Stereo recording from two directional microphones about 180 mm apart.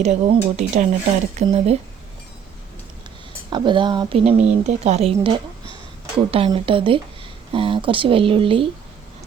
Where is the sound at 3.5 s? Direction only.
25° right (ahead or behind).